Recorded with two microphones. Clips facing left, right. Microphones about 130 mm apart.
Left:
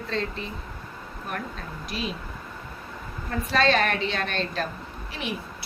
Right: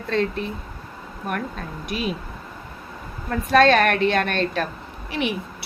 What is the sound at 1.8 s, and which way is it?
Speech, 55° right (ahead or behind).